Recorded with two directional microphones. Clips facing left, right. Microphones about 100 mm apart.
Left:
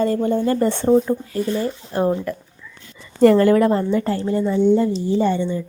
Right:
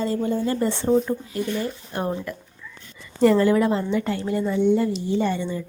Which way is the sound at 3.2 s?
55° left (ahead or behind).